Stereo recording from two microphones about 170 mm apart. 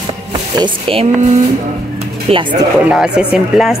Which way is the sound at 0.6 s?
30° right (ahead or behind).